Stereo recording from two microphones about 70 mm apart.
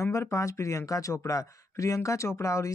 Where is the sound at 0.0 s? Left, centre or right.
Left.